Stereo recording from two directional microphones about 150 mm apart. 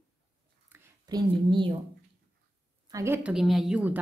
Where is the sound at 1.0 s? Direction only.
30° right (ahead or behind).